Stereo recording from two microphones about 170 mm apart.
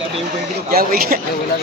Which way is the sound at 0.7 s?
60° right (ahead or behind).